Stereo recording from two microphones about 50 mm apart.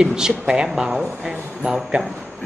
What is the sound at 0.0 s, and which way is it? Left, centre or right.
Speech, centre.